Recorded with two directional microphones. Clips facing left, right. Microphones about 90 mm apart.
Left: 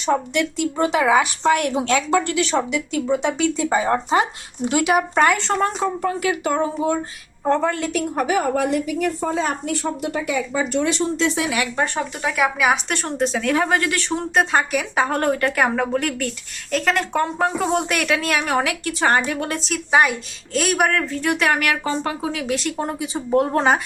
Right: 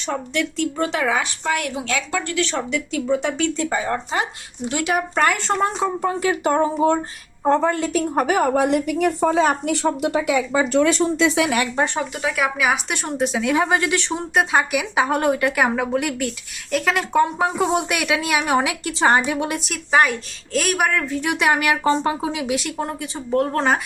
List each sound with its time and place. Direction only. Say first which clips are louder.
0.0 s speech: left 4 dB; 10° left (ahead or behind)
1.5 s a woman's voice: left 4 dB; 30° left (ahead or behind)
2.3 s speech: left 2 dB; 15° left (ahead or behind)
3.7 s speech: left 4 dB; 20° left (ahead or behind)
4.8 s speech: left 2 dB; 10° left (ahead or behind)
6.0 s speech: right 1 dB; 25° right (ahead or behind); by 8.6 s 45° right (ahead or behind)
8.6 s speech: right 2 dB; 65° right (ahead or behind); by 10.6 s 85° right
12.2 s speech: left 2 dB; centre (ahead or behind); by 14.1 s 20° right (ahead or behind)
14.1 s speech: left 2 dB; 5° right (ahead or behind)
21.2 s speech: right 1 dB; 15° right (ahead or behind)
22.5 s speech: left 1 dB; centre (ahead or behind)